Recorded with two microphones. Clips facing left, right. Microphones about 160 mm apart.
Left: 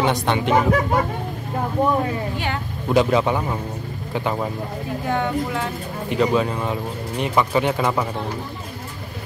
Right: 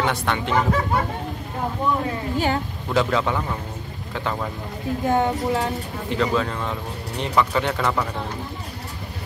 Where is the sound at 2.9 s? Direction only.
20° left (ahead or behind).